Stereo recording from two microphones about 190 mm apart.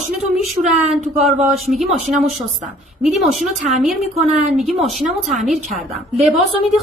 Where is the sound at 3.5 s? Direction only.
40° right (ahead or behind).